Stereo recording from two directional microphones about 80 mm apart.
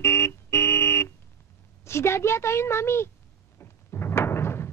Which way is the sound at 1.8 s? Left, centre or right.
Left.